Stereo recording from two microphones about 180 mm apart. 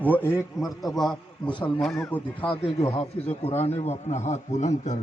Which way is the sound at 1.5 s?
25° left (ahead or behind).